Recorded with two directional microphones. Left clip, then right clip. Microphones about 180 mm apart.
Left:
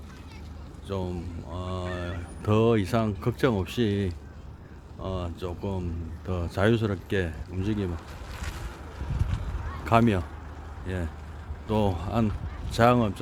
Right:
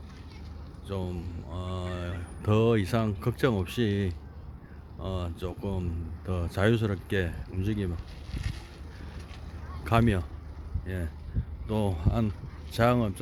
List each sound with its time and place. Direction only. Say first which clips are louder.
0.9 s speech: left 3 dB; 5° left (ahead or behind)
7.9 s a sound: left 5 dB; 45° left (ahead or behind)
9.8 s speech: left 4 dB; centre (ahead or behind)